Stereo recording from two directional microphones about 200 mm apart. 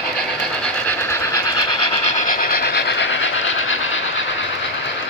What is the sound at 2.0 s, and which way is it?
Train, 40° left (ahead or behind).